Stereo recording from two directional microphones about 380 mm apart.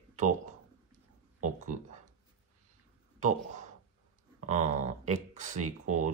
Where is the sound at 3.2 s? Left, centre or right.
Centre.